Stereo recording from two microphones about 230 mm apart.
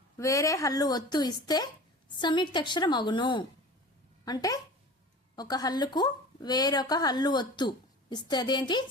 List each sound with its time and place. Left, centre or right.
0.2 s a woman's voice: centre